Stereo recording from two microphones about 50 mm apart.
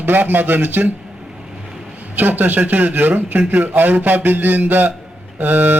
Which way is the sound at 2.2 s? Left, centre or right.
Right.